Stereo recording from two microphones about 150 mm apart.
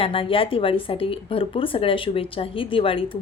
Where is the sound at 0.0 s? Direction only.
35° left (ahead or behind).